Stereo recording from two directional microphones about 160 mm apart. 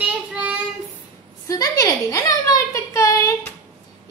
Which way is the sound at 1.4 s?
20° left (ahead or behind).